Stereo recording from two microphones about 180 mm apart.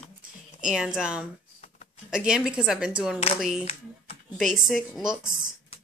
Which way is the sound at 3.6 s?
35° left (ahead or behind).